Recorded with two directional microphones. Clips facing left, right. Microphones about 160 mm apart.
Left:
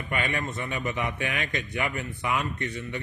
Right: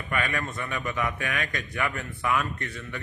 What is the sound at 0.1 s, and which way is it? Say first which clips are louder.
A man's voice: even; 25° left (ahead or behind).